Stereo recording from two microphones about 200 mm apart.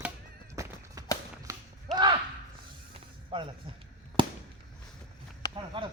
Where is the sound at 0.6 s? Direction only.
15° right (ahead or behind).